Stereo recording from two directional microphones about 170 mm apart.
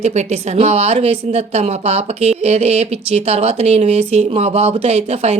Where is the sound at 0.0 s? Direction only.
40° right (ahead or behind).